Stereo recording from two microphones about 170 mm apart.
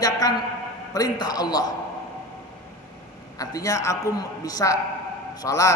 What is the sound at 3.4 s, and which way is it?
A man's voice, 20° left (ahead or behind).